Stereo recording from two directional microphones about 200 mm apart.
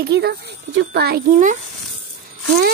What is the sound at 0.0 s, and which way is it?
Speech, 50° right (ahead or behind).